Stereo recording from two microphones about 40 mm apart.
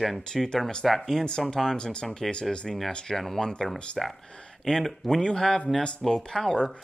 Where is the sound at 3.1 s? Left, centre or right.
Centre.